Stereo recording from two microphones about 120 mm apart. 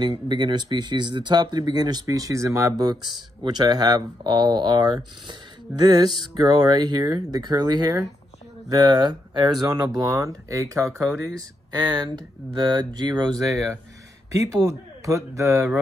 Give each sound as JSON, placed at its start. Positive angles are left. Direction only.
{"t": 0.0, "sound": "speech", "side_deg": -35}